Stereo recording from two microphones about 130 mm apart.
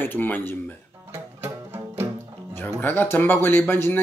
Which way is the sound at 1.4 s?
20° right (ahead or behind).